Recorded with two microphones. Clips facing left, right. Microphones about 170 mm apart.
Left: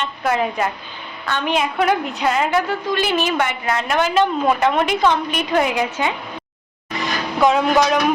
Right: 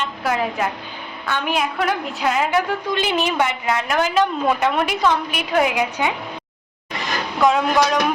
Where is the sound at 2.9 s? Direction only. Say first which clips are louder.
Left 1 dB; 20° right (ahead or behind).